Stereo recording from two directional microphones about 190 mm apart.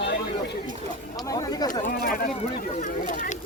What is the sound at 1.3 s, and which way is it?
Speech, 20° left (ahead or behind).